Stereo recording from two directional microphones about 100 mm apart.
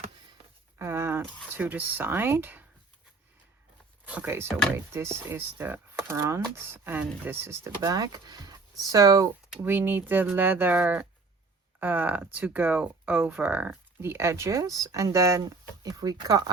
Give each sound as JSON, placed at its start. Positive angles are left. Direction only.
{"t": 0.8, "sound": "a sound", "side_deg": -25}
{"t": 1.5, "sound": "speech", "side_deg": -20}
{"t": 4.0, "sound": "speech", "side_deg": -15}
{"t": 7.8, "sound": "speech", "side_deg": -40}
{"t": 9.6, "sound": "speech", "side_deg": -20}